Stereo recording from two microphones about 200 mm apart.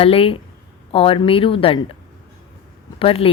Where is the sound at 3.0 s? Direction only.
25° left (ahead or behind).